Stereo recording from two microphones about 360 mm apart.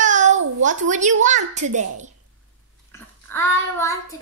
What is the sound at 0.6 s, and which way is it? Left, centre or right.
A woman's voice, right.